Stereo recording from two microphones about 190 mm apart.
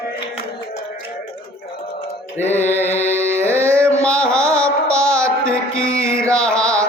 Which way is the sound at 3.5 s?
15° right (ahead or behind).